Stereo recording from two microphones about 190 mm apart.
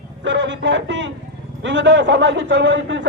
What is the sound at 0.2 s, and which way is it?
A man's voice, 65° right (ahead or behind).